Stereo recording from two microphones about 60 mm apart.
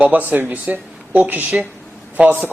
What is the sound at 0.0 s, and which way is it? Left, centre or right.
A man's voice, right.